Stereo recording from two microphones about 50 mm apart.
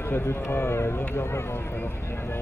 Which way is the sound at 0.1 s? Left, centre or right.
Left.